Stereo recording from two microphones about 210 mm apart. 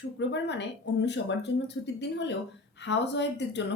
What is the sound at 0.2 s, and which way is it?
Speech, 55° left (ahead or behind).